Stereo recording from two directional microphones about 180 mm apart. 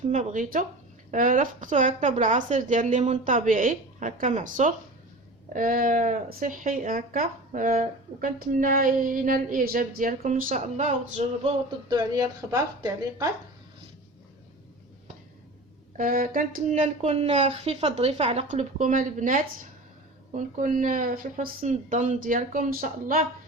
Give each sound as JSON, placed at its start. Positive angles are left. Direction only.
{"t": 0.1, "sound": "speech", "side_deg": -40}
{"t": 11.9, "sound": "a woman's voice", "side_deg": -20}
{"t": 16.0, "sound": "speech", "side_deg": -50}